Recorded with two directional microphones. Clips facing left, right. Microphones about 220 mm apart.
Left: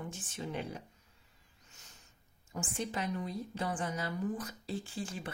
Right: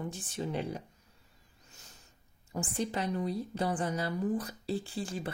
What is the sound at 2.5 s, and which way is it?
Speech, 35° right (ahead or behind).